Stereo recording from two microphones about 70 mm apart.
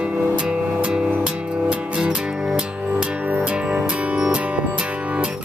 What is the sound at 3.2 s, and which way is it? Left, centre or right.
Music, centre.